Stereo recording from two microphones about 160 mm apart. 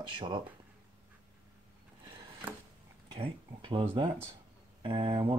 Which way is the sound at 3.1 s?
35° right (ahead or behind).